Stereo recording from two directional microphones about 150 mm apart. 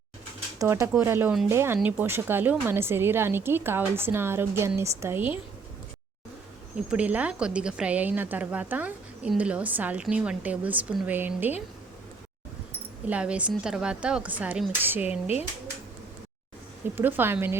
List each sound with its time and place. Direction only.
0.6 s a woman's voice: 20° right (ahead or behind)
6.7 s a woman's voice: 10° right (ahead or behind)
13.1 s a woman's voice: 10° right (ahead or behind)
16.9 s a woman's voice: 15° right (ahead or behind)